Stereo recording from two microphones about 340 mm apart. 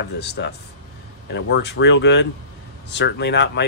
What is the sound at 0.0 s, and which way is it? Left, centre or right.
Speech, left.